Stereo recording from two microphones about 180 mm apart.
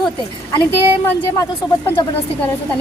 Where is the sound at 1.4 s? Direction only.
20° left (ahead or behind).